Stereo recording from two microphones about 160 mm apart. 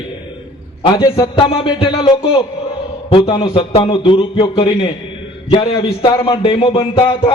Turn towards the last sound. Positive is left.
turn(degrees=35)  # may be behind; listen again after turning